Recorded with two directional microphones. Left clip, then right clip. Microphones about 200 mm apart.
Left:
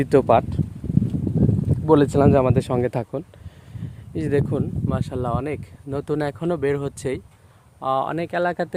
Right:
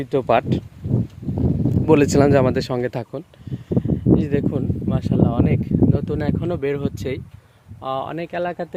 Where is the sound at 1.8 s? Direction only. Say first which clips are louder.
Right 1 dB; 15° right (ahead or behind).